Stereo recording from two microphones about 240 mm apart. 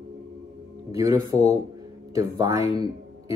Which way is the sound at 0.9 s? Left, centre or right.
Centre.